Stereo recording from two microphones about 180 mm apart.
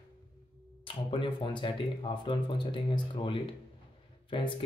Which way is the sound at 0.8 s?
25° left (ahead or behind).